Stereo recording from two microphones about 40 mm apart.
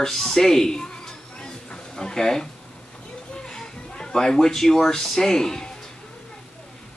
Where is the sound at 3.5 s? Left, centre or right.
Centre.